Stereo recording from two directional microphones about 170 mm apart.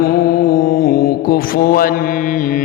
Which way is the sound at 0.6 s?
50° left (ahead or behind).